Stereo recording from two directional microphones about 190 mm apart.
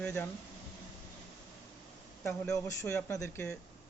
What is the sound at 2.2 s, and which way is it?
Speech, 15° left (ahead or behind).